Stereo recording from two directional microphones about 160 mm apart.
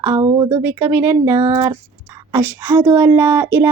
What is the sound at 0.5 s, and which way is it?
Speech, 15° right (ahead or behind).